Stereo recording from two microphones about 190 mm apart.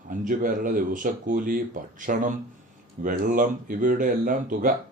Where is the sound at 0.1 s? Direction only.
45° right (ahead or behind).